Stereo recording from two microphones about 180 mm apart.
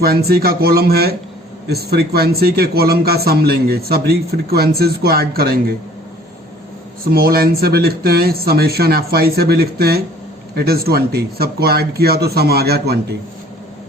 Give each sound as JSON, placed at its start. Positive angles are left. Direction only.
{"t": 0.0, "sound": "speech", "side_deg": -60}
{"t": 7.1, "sound": "speech", "side_deg": -60}